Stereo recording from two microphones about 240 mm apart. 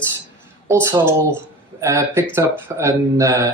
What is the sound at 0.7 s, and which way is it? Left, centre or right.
Speech, centre.